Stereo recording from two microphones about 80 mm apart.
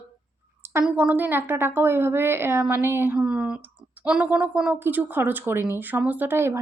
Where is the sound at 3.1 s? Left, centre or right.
Centre.